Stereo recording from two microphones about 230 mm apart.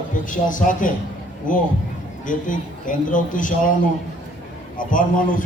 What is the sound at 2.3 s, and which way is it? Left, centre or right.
A man's voice, left.